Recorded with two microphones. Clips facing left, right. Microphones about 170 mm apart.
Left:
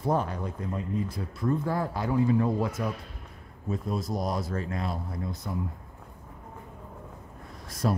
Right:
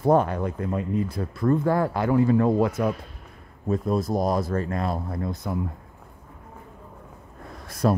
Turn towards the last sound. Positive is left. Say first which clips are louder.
# right 6 dB
turn(degrees=-65)  # may be behind; listen again after turning